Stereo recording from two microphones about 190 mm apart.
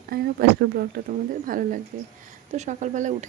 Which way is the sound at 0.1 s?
55° right (ahead or behind).